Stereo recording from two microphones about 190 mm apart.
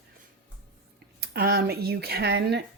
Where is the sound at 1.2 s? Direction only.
55° right (ahead or behind).